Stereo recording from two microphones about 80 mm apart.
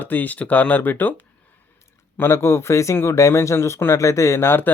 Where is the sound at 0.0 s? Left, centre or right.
Left.